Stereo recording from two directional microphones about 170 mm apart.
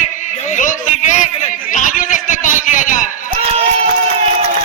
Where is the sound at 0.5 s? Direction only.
50° left (ahead or behind).